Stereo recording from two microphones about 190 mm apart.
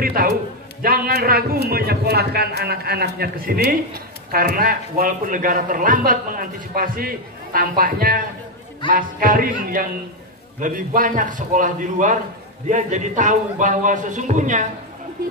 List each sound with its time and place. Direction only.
0.0 s a man's voice: 50° right (ahead or behind)